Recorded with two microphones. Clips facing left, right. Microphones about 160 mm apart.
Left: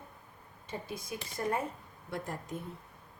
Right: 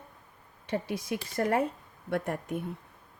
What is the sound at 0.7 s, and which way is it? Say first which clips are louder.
Speech: right 8 dB; 75° right (ahead or behind).